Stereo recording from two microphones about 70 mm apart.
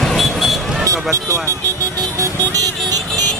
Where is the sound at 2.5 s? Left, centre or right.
Right.